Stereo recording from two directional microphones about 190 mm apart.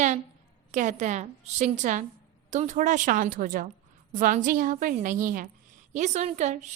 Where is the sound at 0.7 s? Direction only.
40° right (ahead or behind).